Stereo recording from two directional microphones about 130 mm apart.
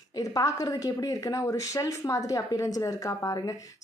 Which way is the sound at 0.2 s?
25° left (ahead or behind).